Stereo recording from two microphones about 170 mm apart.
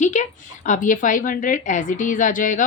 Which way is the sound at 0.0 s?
45° left (ahead or behind).